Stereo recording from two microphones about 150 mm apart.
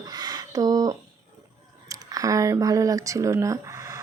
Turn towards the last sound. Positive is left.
turn(degrees=-20)  # may be behind; listen again after turning